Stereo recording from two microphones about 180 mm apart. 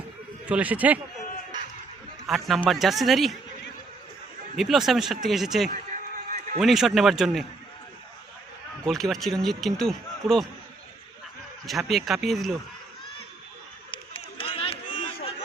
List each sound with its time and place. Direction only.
0.4 s speech: 10° right (ahead or behind)
2.2 s speech: centre (ahead or behind)
4.5 s speech: centre (ahead or behind)
5.6 s insect: 50° right (ahead or behind)
6.6 s speech: centre (ahead or behind)
8.8 s speech: centre (ahead or behind)
11.6 s speech: centre (ahead or behind)
13.9 s run: 30° left (ahead or behind)
14.9 s a sound: 35° left (ahead or behind)